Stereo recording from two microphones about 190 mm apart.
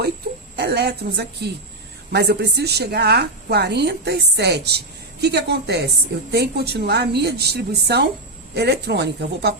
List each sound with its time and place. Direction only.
0.5 s a woman's voice: 60° right (ahead or behind)